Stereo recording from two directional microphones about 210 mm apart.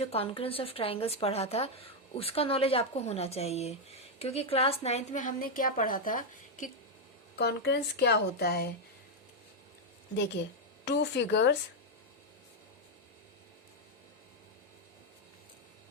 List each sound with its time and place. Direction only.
0.0 s speech: 30° left (ahead or behind)
7.3 s speech: 50° left (ahead or behind)
10.8 s a woman's voice: 55° left (ahead or behind)